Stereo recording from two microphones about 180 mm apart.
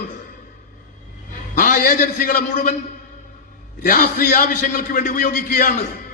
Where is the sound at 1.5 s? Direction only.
50° left (ahead or behind).